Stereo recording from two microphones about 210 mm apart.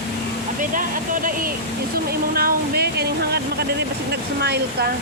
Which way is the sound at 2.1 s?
45° right (ahead or behind).